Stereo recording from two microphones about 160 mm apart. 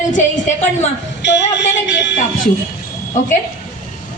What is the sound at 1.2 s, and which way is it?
Speech, 90° left.